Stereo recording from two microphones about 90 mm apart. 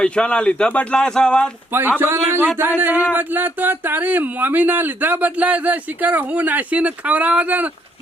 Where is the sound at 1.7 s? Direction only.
25° right (ahead or behind).